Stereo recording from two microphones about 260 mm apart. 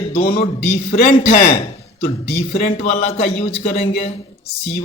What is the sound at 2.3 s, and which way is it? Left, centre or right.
A man's voice, left.